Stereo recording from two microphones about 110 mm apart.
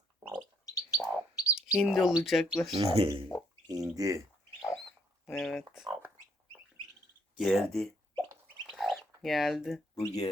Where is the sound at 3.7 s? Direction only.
35° right (ahead or behind).